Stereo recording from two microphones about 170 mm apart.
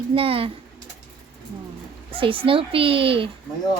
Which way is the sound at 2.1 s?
30° right (ahead or behind).